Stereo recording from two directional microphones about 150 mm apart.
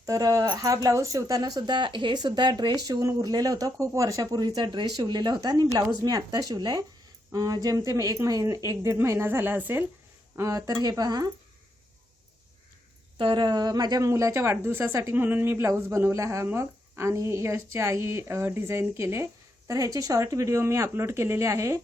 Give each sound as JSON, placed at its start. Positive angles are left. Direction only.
{"t": 0.0, "sound": "speech", "side_deg": -25}
{"t": 13.1, "sound": "speech", "side_deg": -35}